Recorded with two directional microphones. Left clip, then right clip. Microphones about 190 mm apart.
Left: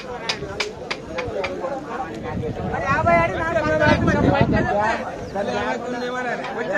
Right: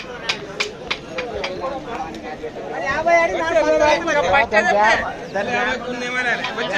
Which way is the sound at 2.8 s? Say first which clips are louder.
Right 2 dB; centre (ahead or behind).